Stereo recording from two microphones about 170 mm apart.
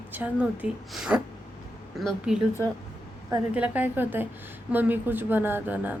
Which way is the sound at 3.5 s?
10° right (ahead or behind).